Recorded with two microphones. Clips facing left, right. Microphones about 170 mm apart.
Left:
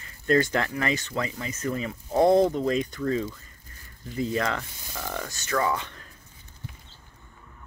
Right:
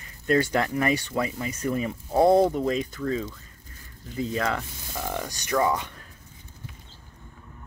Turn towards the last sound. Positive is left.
turn(degrees=-10)  # may be behind; listen again after turning